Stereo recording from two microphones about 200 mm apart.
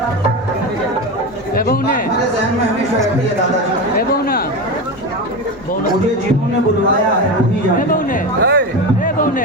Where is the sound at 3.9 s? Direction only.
50° left (ahead or behind).